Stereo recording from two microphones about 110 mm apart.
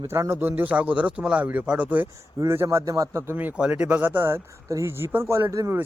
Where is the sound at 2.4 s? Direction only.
25° right (ahead or behind).